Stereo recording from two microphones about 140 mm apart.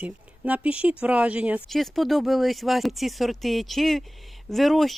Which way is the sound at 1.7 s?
Centre (ahead or behind).